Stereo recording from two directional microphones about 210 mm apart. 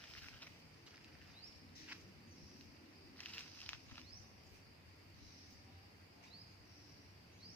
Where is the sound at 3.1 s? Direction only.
5° left (ahead or behind).